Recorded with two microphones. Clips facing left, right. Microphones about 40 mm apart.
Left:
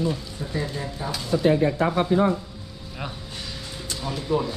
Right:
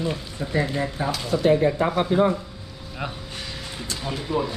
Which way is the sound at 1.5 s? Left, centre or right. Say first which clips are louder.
Right 2 dB; right.